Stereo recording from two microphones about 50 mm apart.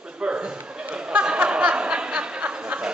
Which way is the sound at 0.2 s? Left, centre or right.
Right.